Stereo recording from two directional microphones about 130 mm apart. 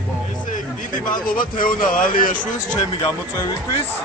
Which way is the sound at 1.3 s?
90° left.